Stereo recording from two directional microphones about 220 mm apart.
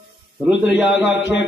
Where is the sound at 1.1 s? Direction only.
55° left (ahead or behind).